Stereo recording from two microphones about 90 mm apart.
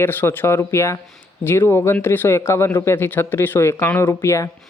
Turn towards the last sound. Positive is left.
turn(degrees=30)  # may be behind; listen again after turning